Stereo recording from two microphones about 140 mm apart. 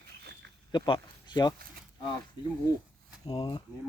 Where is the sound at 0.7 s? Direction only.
30° left (ahead or behind).